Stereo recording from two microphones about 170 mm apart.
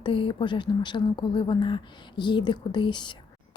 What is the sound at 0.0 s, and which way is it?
A woman's voice, 30° left (ahead or behind).